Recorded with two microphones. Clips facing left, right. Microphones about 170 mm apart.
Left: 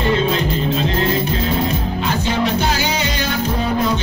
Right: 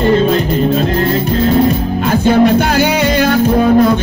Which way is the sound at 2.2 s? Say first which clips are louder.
Right 12 dB; 50° right (ahead or behind).